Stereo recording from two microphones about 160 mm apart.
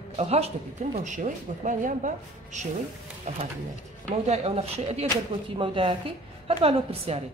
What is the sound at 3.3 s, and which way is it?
A woman's voice, 45° right (ahead or behind).